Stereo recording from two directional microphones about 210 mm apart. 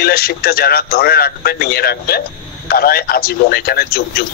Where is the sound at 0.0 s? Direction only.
45° left (ahead or behind).